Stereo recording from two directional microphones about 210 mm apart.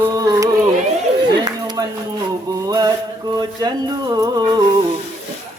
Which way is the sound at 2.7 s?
20° right (ahead or behind).